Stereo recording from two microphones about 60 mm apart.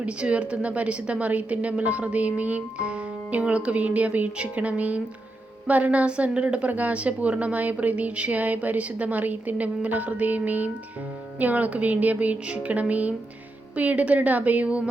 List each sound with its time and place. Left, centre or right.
0.0 s a woman's voice: centre